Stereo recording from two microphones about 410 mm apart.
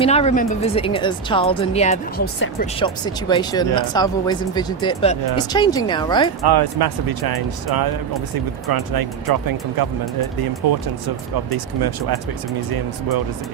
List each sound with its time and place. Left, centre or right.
0.0 s speech: centre
6.4 s speech: right
11.5 s speech: right